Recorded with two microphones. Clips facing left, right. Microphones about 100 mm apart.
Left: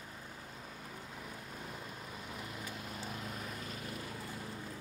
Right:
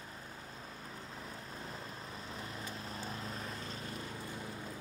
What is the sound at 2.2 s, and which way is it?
Vehicle, 30° right (ahead or behind).